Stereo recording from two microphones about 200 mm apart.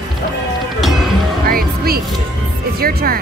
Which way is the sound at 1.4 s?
50° right (ahead or behind).